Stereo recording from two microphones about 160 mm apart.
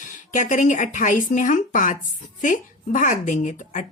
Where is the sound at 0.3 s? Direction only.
50° left (ahead or behind).